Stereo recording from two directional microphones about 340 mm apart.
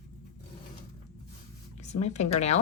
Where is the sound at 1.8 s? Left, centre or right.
Centre.